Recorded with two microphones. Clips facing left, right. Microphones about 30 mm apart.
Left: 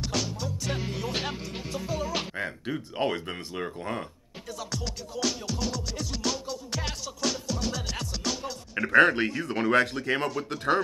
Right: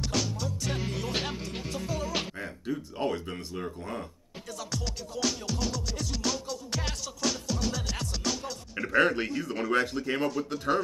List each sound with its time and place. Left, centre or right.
0.0 s music: centre
2.3 s speech: left
4.5 s music: centre
9.0 s speech: left